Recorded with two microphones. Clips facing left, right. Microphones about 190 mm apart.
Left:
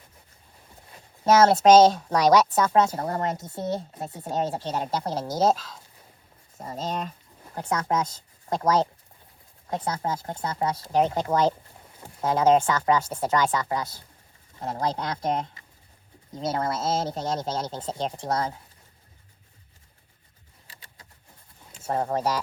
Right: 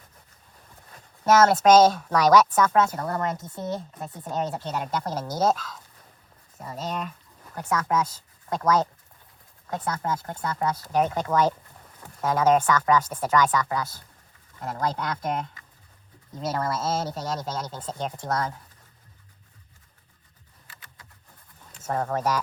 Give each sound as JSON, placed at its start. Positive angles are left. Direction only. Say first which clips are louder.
{"t": 0.9, "sound": "a sound", "louder": "left 1 dB", "side_deg": 10}
{"t": 1.5, "sound": "speech", "louder": "left 3 dB", "side_deg": 25}
{"t": 3.2, "sound": "speech", "louder": "left 1 dB", "side_deg": 40}
{"t": 5.0, "sound": "speech", "louder": "left 2 dB", "side_deg": 20}
{"t": 6.6, "sound": "speech", "louder": "left 1 dB", "side_deg": 40}
{"t": 21.8, "sound": "speech", "louder": "left 1 dB", "side_deg": 25}